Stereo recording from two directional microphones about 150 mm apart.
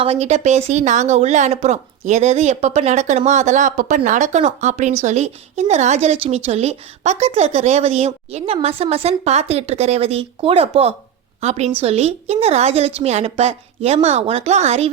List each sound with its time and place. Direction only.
0.0 s a woman's voice: 45° right (ahead or behind)